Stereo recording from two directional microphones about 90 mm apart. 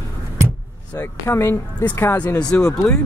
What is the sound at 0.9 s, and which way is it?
Speech, 25° left (ahead or behind).